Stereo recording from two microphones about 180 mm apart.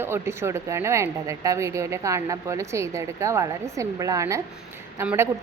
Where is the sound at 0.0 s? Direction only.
15° right (ahead or behind).